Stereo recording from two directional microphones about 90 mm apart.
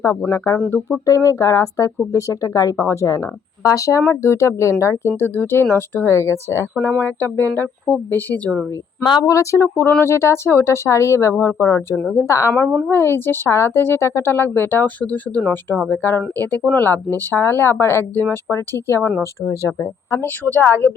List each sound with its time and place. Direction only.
0.3 s speech: 35° left (ahead or behind); by 9.0 s 20° left (ahead or behind)
9.2 s speech: 35° left (ahead or behind)
20.2 s speech: 20° left (ahead or behind)